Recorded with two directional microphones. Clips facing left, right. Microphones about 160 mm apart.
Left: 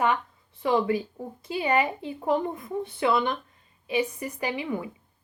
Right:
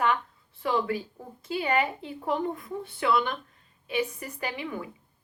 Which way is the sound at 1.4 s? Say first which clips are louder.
Left 2 dB; 15° left (ahead or behind).